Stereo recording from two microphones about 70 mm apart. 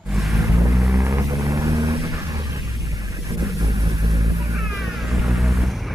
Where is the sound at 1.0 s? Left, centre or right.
Right.